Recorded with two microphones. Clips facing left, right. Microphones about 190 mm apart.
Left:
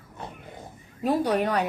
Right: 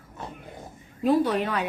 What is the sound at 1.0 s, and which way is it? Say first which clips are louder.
Speech: right 1 dB; 40° left (ahead or behind).